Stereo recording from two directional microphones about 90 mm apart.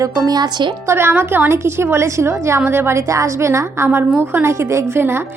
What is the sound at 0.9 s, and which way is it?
A woman's voice, 25° right (ahead or behind).